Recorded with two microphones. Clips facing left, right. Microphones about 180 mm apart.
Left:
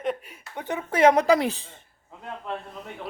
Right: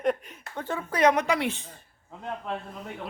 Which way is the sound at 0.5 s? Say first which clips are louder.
Left 3 dB; 20° left (ahead or behind).